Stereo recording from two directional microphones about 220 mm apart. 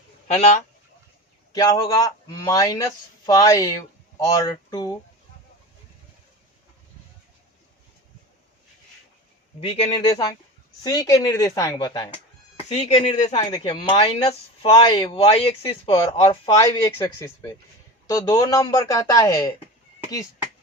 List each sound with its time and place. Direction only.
0.3 s speech: 30° left (ahead or behind)
1.5 s a man's voice: 15° left (ahead or behind)
9.6 s a man's voice: 25° left (ahead or behind)
12.6 s a man's voice: 30° left (ahead or behind); by 19.5 s 15° left (ahead or behind)